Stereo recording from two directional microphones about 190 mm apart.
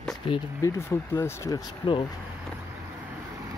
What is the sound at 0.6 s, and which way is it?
Speech, 15° left (ahead or behind).